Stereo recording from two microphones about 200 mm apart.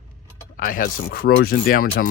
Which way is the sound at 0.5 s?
45° left (ahead or behind).